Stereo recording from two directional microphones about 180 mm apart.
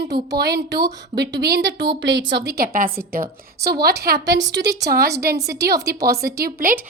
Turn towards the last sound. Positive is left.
turn(degrees=-55)  # may be behind; listen again after turning